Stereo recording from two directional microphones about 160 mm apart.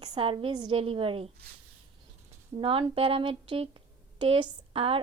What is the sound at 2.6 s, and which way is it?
A woman's voice, 35° right (ahead or behind).